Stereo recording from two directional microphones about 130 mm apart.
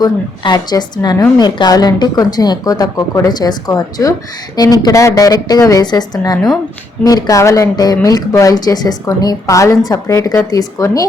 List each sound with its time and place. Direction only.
0.0 s a woman's voice: 30° left (ahead or behind)